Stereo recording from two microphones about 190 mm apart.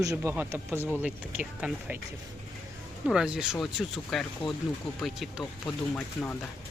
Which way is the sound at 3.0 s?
5° right (ahead or behind).